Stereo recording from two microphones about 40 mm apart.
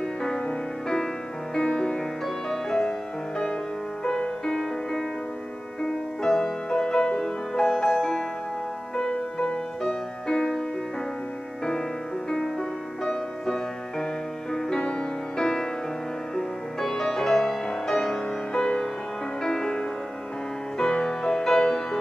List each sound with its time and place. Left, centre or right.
0.0 s music: centre
6.2 s music: centre
12.3 s music: centre